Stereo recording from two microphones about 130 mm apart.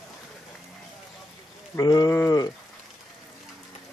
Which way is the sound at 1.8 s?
30° left (ahead or behind).